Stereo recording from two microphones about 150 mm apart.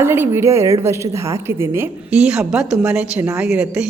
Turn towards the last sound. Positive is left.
turn(degrees=-5)  # may be behind; listen again after turning